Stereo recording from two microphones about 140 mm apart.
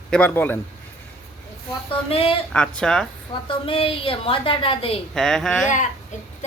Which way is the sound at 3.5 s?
40° left (ahead or behind).